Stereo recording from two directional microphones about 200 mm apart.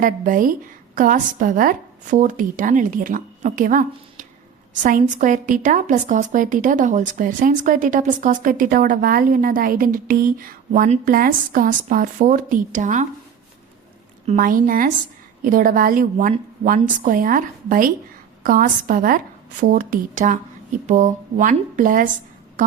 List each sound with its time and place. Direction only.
0.0 s a woman's voice: 40° right (ahead or behind)
14.3 s a woman's voice: 45° right (ahead or behind)